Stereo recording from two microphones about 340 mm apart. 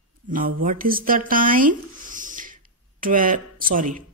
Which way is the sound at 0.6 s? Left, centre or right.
Right.